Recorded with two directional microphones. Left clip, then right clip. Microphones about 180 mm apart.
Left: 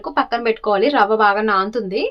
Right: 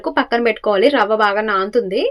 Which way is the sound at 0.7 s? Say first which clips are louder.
Right 1 dB; 5° right (ahead or behind).